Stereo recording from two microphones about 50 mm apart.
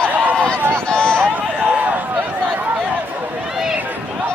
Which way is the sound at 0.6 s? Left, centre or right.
Right.